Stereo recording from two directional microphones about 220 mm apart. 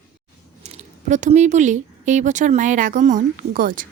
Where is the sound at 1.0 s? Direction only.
35° right (ahead or behind).